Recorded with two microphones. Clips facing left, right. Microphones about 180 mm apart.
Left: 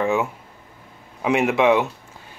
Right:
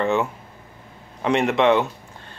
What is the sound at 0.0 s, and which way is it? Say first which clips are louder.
Speech: even; centre (ahead or behind).